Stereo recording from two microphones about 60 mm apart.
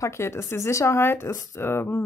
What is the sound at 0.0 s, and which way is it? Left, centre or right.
Speech, left.